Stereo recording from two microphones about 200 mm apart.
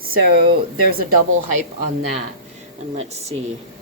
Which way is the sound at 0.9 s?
45° right (ahead or behind).